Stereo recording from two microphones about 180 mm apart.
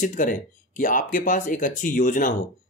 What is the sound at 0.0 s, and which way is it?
Speech, 50° left (ahead or behind).